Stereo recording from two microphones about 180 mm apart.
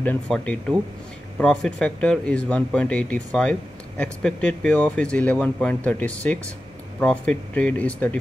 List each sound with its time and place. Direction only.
0.0 s speech: 10° left (ahead or behind)